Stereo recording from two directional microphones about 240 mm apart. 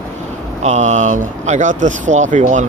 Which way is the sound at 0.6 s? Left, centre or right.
Right.